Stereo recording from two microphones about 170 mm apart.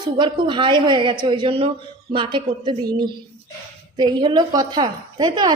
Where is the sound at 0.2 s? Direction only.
30° right (ahead or behind).